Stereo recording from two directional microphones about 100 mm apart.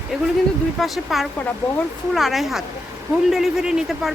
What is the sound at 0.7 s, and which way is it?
Speech, centre (ahead or behind).